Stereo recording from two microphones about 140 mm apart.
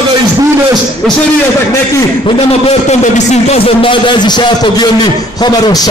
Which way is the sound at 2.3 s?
45° left (ahead or behind).